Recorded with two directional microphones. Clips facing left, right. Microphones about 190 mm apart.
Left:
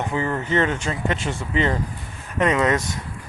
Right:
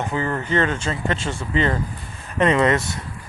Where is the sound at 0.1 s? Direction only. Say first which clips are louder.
Even; 15° left (ahead or behind).